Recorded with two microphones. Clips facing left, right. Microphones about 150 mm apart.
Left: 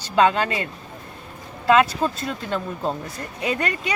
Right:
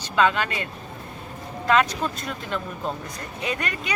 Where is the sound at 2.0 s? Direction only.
30° left (ahead or behind).